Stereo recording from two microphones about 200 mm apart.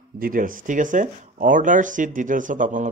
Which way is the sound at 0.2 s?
45° right (ahead or behind).